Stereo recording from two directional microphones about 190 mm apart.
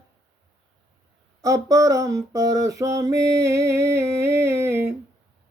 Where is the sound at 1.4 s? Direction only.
15° right (ahead or behind).